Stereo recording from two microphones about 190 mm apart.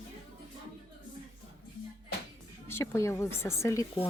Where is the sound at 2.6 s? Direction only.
10° left (ahead or behind).